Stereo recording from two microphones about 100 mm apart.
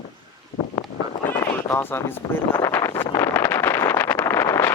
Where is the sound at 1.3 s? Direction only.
25° left (ahead or behind).